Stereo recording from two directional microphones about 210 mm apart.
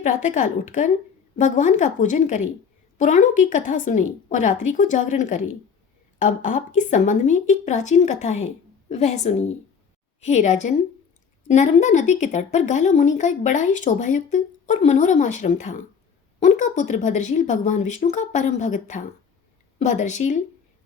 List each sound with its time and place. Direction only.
0.0 s speech: 35° left (ahead or behind)